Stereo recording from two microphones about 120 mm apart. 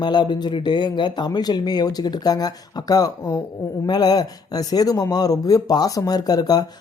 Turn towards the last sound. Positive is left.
turn(degrees=30)  # may be behind; listen again after turning